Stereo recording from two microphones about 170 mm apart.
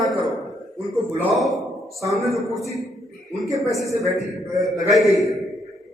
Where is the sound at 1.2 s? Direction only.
Centre (ahead or behind).